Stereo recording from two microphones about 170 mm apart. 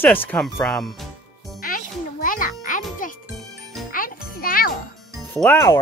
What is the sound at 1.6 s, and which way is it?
Music, 55° left (ahead or behind).